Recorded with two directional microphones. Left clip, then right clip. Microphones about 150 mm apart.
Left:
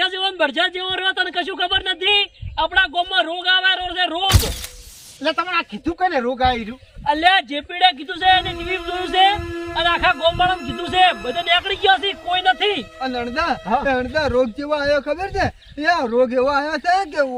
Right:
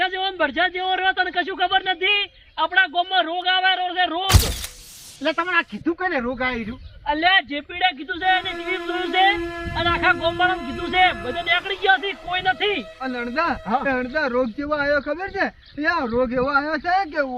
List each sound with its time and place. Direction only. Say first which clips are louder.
0.0 s speech: left 2 dB; 35° left (ahead or behind)
4.3 s speech: left 1 dB; centre (ahead or behind)
5.2 s speech: left 1 dB; 45° left (ahead or behind)
6.7 s speech: left 4 dB; 30° left (ahead or behind)
14.6 s speech: left 2 dB; 45° left (ahead or behind)
16.1 s speech: left 5 dB; 30° left (ahead or behind)
16.5 s speech: left 2 dB; 45° left (ahead or behind)